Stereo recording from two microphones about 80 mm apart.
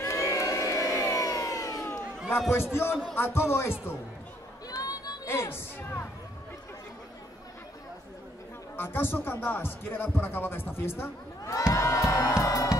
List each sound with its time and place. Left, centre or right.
0.0 s crowd: left
1.9 s a sound: left
2.5 s speech: left
4.6 s a sound: left
5.2 s music: left
8.7 s speech: left
11.7 s crowd: left